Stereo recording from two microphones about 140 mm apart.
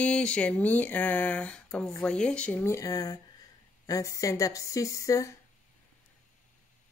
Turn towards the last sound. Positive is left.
turn(degrees=20)  # may be behind; listen again after turning